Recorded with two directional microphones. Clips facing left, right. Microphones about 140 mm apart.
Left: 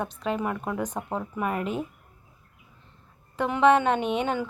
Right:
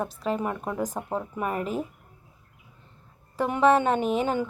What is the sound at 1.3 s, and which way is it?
Speech, 30° right (ahead or behind).